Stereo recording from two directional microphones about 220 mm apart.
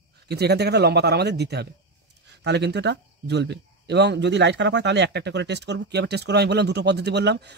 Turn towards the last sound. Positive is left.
turn(degrees=-50)  # may be behind; listen again after turning